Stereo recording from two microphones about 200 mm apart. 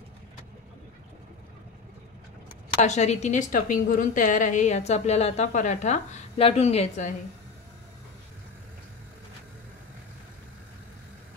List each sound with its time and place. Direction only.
2.8 s a woman's voice: 35° left (ahead or behind)